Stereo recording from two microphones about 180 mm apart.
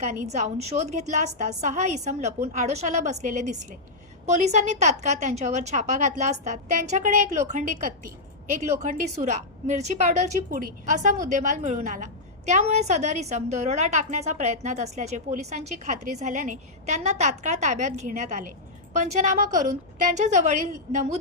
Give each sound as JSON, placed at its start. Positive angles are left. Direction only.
{"t": 0.0, "sound": "a woman's voice", "side_deg": -40}
{"t": 8.8, "sound": "a woman's voice", "side_deg": -45}